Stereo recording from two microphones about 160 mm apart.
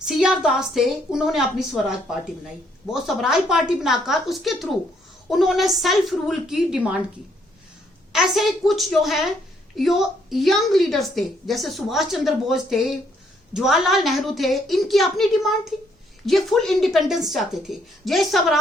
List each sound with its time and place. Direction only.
0.0 s a woman's voice: 5° right (ahead or behind)
8.1 s a woman's voice: centre (ahead or behind)